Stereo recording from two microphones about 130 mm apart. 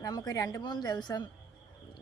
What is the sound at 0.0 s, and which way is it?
Speech, 30° left (ahead or behind).